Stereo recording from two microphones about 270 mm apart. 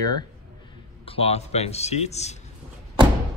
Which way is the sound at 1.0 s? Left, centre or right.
Left.